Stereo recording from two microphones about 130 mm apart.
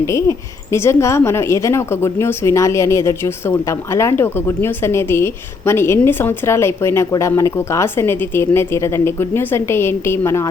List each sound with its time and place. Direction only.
0.0 s speech: 20° left (ahead or behind)